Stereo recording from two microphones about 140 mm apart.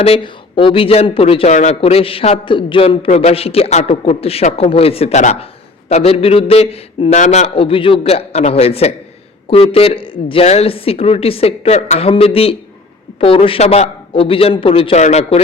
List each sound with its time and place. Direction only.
0.0 s a man's voice: 40° left (ahead or behind)
5.9 s a man's voice: 45° left (ahead or behind)